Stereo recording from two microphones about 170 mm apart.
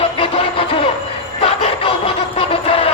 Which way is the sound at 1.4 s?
35° left (ahead or behind).